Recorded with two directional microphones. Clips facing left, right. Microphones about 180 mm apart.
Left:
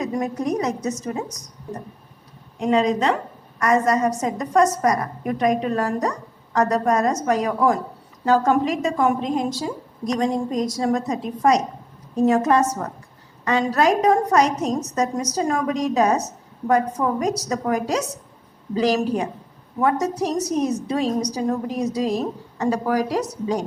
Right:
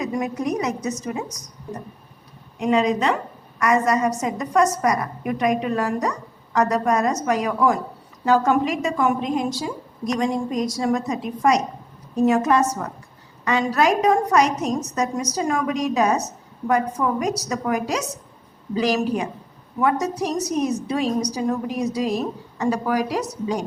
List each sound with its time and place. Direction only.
0.0 s a woman's voice: 35° left (ahead or behind)
2.6 s a woman's voice: 35° left (ahead or behind)